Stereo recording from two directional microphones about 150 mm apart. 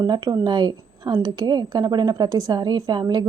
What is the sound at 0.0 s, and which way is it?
Speech, 25° right (ahead or behind).